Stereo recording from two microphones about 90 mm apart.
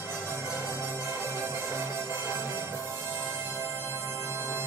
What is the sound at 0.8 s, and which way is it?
Music, 25° right (ahead or behind).